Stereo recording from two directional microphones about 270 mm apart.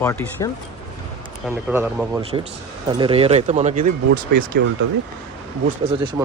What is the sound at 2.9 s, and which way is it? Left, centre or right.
Speech, centre.